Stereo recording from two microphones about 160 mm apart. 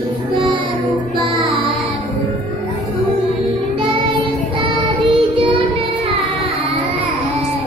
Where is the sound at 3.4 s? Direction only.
35° right (ahead or behind).